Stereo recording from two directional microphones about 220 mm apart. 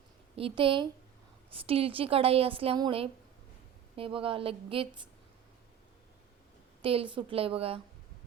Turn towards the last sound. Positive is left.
turn(degrees=-25)  # may be behind; listen again after turning